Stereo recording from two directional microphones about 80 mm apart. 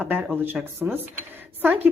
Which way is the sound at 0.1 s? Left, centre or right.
Centre.